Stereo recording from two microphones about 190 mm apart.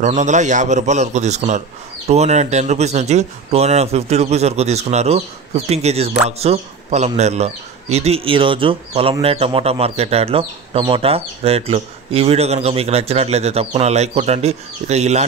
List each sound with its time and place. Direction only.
0.2 s speech: 40° right (ahead or behind)